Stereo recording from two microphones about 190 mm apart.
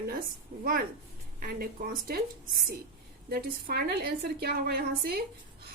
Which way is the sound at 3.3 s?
55° right (ahead or behind).